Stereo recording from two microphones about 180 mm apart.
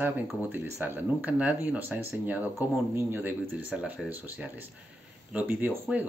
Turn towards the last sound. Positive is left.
turn(degrees=-10)  # may be behind; listen again after turning